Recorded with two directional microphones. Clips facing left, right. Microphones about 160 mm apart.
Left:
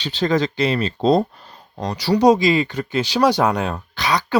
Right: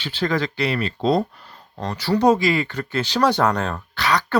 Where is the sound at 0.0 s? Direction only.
20° left (ahead or behind).